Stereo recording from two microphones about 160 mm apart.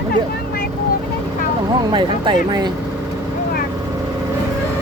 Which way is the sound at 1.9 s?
30° right (ahead or behind).